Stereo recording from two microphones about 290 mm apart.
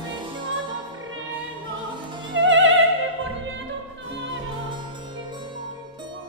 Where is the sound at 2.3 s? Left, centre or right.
Right.